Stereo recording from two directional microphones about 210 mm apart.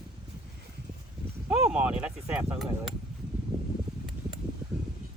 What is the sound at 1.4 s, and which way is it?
Speech, 5° right (ahead or behind).